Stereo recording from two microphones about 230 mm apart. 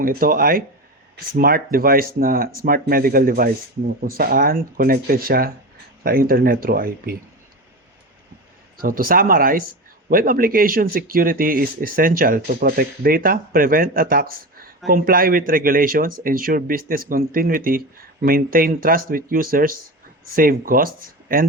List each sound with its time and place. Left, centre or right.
0.0 s speech: right
8.8 s speech: right